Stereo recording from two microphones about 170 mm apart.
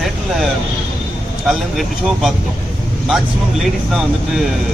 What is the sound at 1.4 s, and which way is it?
Speech, centre (ahead or behind).